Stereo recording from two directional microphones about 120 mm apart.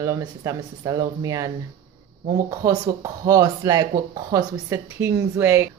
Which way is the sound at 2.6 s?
30° right (ahead or behind).